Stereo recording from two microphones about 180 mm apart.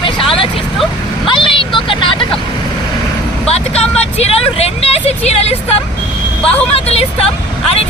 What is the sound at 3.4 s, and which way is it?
Vehicle, 35° left (ahead or behind).